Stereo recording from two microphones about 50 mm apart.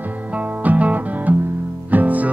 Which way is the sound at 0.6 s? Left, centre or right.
Right.